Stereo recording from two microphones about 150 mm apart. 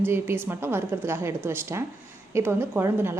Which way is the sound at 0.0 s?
15° right (ahead or behind).